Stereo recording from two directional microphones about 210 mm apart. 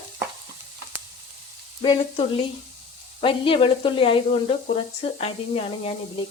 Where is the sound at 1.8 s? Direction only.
25° left (ahead or behind).